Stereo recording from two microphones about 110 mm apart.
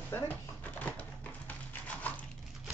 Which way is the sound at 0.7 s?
15° left (ahead or behind).